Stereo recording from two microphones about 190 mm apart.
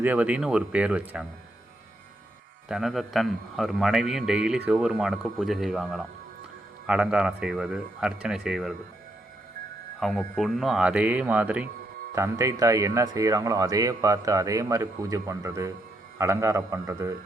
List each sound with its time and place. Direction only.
0.0 s a man's voice: 10° right (ahead or behind)
2.6 s a man's voice: centre (ahead or behind)
10.0 s a man's voice: centre (ahead or behind); by 17.2 s 15° right (ahead or behind)